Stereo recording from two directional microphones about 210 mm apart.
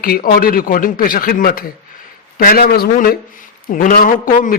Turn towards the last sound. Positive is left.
turn(degrees=40)  # may be behind; listen again after turning